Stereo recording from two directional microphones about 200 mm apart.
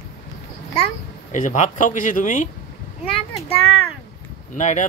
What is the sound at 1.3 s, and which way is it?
Speech, 40° left (ahead or behind).